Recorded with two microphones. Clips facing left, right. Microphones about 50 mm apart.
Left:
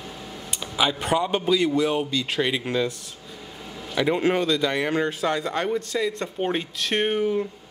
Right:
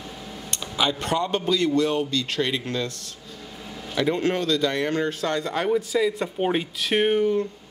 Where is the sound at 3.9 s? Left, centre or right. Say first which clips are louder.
Left 1 dB; centre.